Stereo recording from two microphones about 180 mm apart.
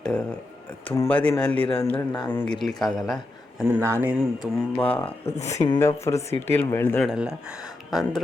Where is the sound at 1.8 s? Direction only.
15° left (ahead or behind).